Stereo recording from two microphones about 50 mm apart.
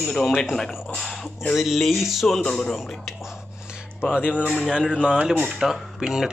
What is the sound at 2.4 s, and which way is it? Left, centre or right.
Speech, centre.